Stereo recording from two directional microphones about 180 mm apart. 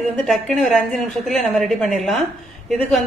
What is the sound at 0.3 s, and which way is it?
A woman's voice, centre (ahead or behind).